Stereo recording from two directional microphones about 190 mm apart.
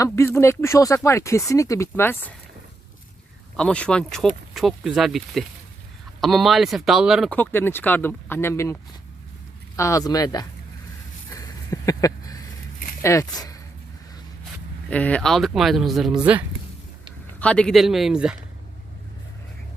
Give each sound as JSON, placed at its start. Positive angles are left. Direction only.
{"t": 0.0, "sound": "speech", "side_deg": 15}
{"t": 3.6, "sound": "speech", "side_deg": 5}
{"t": 7.3, "sound": "speech", "side_deg": 10}
{"t": 11.3, "sound": "a sound", "side_deg": 15}
{"t": 13.0, "sound": "speech", "side_deg": 15}
{"t": 14.8, "sound": "speech", "side_deg": 5}
{"t": 17.4, "sound": "speech", "side_deg": 5}